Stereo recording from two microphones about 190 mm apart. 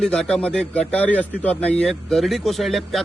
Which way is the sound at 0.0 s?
5° left (ahead or behind).